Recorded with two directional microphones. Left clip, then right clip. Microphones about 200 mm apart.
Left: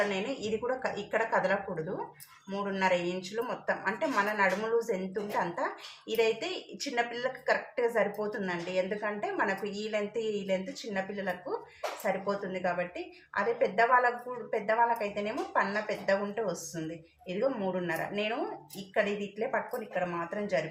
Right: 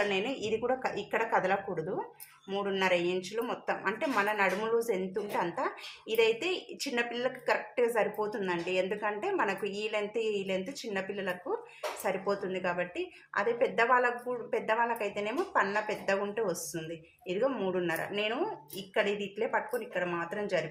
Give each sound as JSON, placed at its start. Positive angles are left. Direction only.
{"t": 0.1, "sound": "speech", "side_deg": -20}